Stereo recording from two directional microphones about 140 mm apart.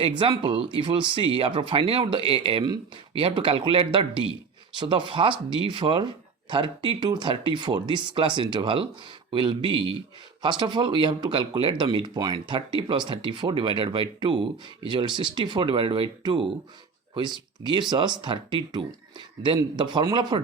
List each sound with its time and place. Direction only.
0.2 s speech: 40° right (ahead or behind)